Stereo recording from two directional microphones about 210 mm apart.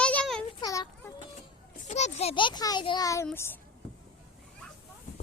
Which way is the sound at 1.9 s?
30° left (ahead or behind).